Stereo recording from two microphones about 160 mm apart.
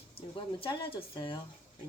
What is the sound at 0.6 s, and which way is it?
Speech, 35° left (ahead or behind).